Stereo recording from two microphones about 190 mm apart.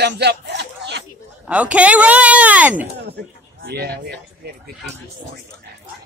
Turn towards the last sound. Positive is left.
turn(degrees=-60)  # may be behind; listen again after turning